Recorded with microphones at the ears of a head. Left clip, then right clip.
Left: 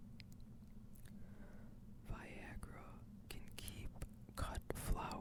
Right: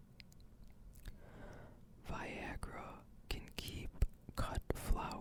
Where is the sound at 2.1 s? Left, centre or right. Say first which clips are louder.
Right 9 dB; right.